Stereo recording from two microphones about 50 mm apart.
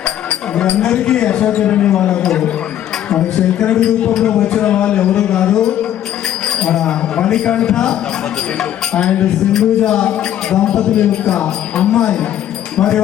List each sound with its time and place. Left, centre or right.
0.0 s a sound: left
0.8 s speech: centre
1.9 s music: centre
4.6 s speech: left
5.1 s music: centre
9.9 s speech: left